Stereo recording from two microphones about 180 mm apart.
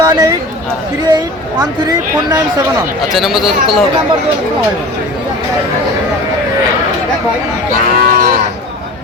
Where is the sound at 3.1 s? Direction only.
Centre (ahead or behind).